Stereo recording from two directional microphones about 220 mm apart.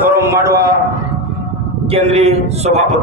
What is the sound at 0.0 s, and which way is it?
Speech, 10° right (ahead or behind).